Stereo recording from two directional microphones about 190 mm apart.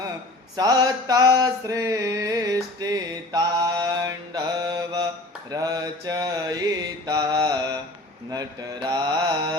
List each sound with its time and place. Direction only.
0.5 s mantra: 20° right (ahead or behind)